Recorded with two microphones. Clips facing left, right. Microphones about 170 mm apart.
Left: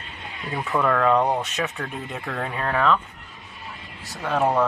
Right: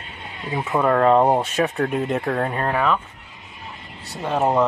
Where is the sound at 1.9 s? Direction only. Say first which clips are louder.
Right 10 dB; 65° right (ahead or behind); by 2.7 s 40° right (ahead or behind).